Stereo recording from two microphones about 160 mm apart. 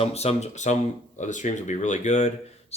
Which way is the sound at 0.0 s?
40° left (ahead or behind).